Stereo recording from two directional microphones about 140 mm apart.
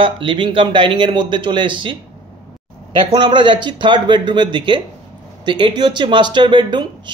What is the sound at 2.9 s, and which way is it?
A woman's voice, 35° right (ahead or behind).